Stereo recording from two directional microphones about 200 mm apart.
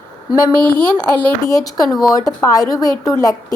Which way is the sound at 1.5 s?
20° left (ahead or behind).